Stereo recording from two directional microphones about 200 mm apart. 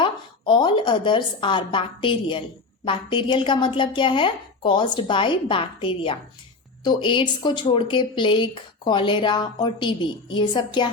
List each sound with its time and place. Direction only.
0.0 s speech: 25° left (ahead or behind)